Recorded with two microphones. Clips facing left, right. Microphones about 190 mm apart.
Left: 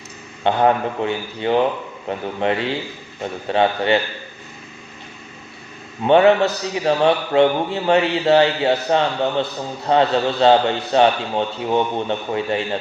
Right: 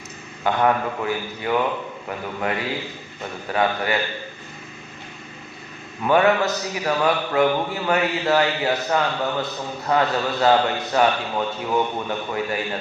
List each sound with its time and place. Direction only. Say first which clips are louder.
0.4 s a man's voice: left 3 dB; 25° left (ahead or behind)
6.0 s a man's voice: left 5 dB; 25° left (ahead or behind)